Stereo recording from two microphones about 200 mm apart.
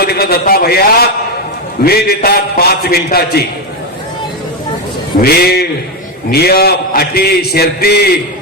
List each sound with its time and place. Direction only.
0.0 s a sound: 50° left (ahead or behind)
1.8 s a man's voice: 50° left (ahead or behind)
5.2 s a man's voice: 55° left (ahead or behind)